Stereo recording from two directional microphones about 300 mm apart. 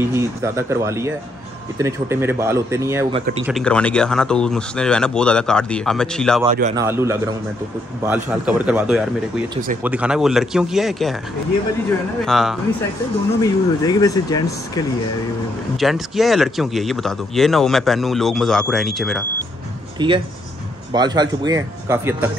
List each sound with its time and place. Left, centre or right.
0.1 s speech: centre
3.2 s speech: right
3.4 s speech: centre
6.4 s speech: right
6.7 s speech: centre
12.3 s speech: centre
13.4 s speech: centre
15.8 s speech: centre
20.0 s speech: centre